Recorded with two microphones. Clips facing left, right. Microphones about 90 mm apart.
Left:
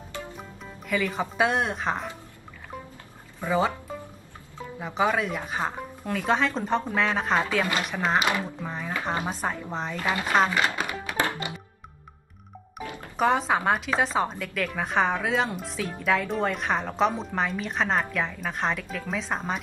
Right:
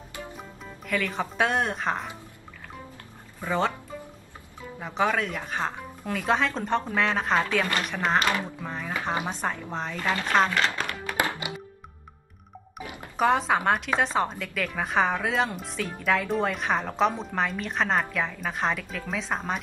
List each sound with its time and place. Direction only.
0.4 s speech: 5° left (ahead or behind)
3.3 s speech: 5° left (ahead or behind)
4.7 s a woman's voice: 5° left (ahead or behind)
11.1 s music: 15° right (ahead or behind)
13.2 s a woman's voice: centre (ahead or behind)